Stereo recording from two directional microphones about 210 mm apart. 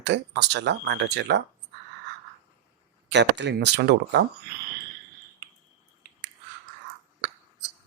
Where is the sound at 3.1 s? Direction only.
55° right (ahead or behind).